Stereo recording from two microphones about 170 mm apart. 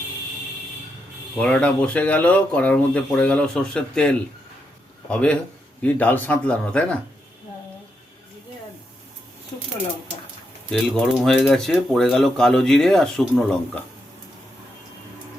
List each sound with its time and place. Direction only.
1.4 s speech: 5° left (ahead or behind)
10.7 s speech: centre (ahead or behind)